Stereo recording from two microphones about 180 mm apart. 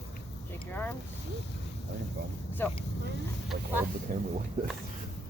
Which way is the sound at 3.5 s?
55° right (ahead or behind).